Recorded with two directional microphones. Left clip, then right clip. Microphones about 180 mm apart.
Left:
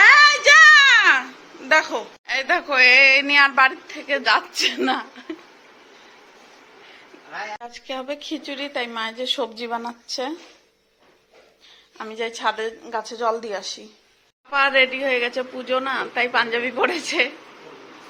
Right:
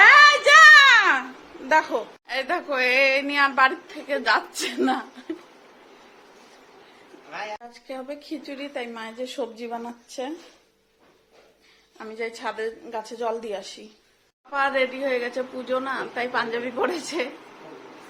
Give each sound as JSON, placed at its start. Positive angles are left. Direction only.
{"t": 0.0, "sound": "a sound", "side_deg": 0}
{"t": 1.6, "sound": "a woman's voice", "side_deg": 0}
{"t": 7.6, "sound": "a woman's voice", "side_deg": 5}
{"t": 12.1, "sound": "a woman's voice", "side_deg": 5}